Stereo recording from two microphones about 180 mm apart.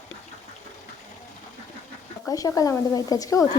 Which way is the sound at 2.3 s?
20° left (ahead or behind).